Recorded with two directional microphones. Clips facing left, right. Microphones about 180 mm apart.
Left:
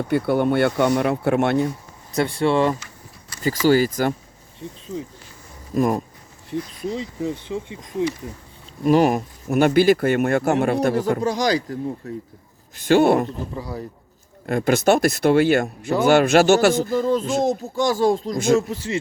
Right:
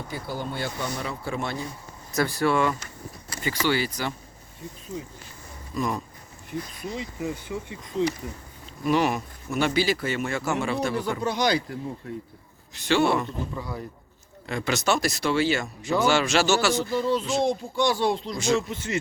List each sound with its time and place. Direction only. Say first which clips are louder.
0.1 s speech: left 15 dB; 65° left (ahead or behind)
2.1 s speech: left 4 dB; 25° left (ahead or behind)
3.4 s speech: left 8 dB; 40° left (ahead or behind)
5.7 s speech: left 8 dB; 50° left (ahead or behind)
6.5 s speech: left 6 dB; 35° left (ahead or behind)
8.8 s speech: left 7 dB; 40° left (ahead or behind)
12.7 s speech: left 7 dB; 50° left (ahead or behind)
13.5 s speech: left 3 dB; 35° left (ahead or behind)
14.4 s speech: left 8 dB; 50° left (ahead or behind)
18.7 s speech: left 4 dB; 35° left (ahead or behind)